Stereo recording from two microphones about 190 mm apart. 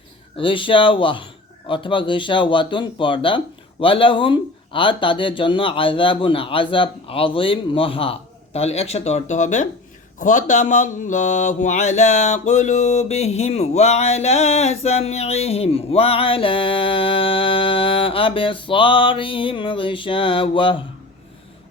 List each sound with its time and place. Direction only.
0.3 s a man's voice: 25° left (ahead or behind)
10.2 s mantra: 40° left (ahead or behind)